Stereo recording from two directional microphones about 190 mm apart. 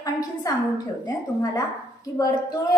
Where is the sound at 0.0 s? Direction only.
20° left (ahead or behind).